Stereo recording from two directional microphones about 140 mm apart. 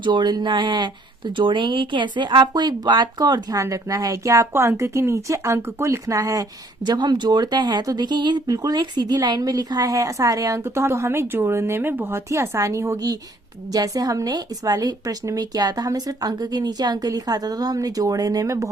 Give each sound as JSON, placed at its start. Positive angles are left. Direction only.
{"t": 0.0, "sound": "speech", "side_deg": -35}